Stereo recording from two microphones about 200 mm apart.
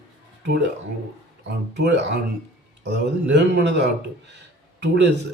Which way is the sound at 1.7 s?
60° right (ahead or behind).